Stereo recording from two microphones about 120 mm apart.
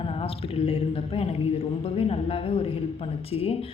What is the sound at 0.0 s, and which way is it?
Speech, 50° left (ahead or behind).